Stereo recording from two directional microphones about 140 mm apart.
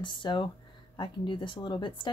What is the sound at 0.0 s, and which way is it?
A woman's voice, 35° left (ahead or behind).